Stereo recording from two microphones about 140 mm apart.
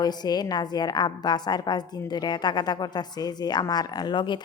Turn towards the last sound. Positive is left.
turn(degrees=35)  # may be behind; listen again after turning